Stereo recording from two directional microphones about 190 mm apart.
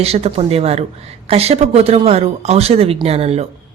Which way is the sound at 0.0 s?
35° right (ahead or behind).